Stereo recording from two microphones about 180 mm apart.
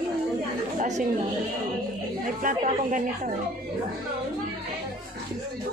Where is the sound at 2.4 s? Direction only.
45° right (ahead or behind).